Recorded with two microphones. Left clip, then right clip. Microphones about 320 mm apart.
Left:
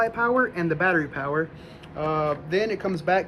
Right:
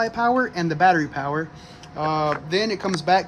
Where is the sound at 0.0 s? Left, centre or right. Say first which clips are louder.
Right 1 dB; right.